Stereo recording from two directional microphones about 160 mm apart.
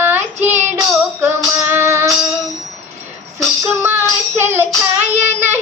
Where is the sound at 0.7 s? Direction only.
15° right (ahead or behind).